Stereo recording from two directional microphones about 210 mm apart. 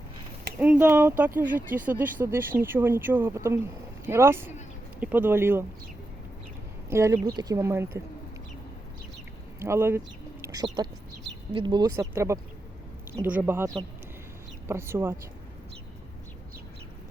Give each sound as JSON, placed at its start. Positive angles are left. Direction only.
{"t": 0.6, "sound": "speech", "side_deg": -10}
{"t": 6.9, "sound": "speech", "side_deg": -15}
{"t": 9.6, "sound": "speech", "side_deg": -15}
{"t": 14.7, "sound": "speech", "side_deg": -10}